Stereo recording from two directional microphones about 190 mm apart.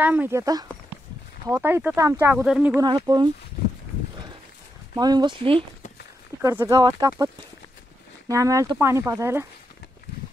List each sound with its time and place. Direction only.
0.0 s speech: 10° right (ahead or behind)
2.8 s speech: 20° right (ahead or behind)
4.9 s speech: 20° right (ahead or behind)
6.4 s speech: 15° right (ahead or behind)
8.3 s speech: 15° right (ahead or behind)